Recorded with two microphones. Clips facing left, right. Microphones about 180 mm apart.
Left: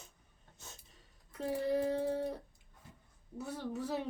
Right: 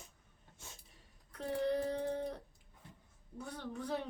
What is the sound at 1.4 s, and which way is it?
A woman's voice, 5° left (ahead or behind).